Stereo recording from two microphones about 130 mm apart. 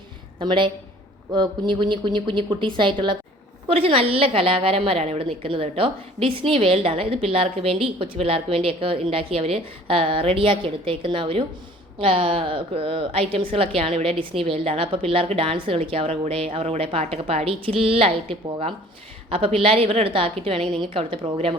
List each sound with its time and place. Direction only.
0.3 s a woman's voice: 40° right (ahead or behind)